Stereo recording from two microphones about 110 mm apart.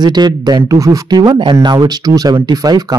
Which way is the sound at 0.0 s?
40° right (ahead or behind).